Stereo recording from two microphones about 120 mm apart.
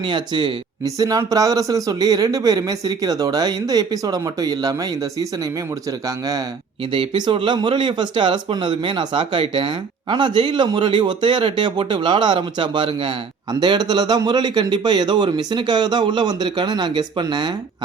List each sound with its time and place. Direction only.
0.1 s speech: 40° right (ahead or behind)
0.9 s a man's voice: 30° right (ahead or behind)
6.9 s a man's voice: 45° right (ahead or behind)